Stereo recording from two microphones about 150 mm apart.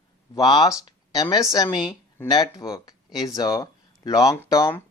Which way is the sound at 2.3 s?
25° left (ahead or behind).